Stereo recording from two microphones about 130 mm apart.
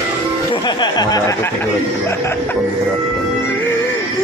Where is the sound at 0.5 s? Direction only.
35° left (ahead or behind).